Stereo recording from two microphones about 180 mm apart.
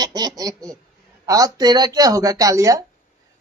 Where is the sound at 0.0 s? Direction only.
20° right (ahead or behind).